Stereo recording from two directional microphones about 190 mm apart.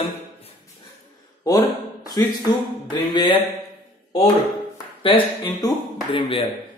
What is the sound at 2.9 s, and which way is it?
Speech, 20° left (ahead or behind).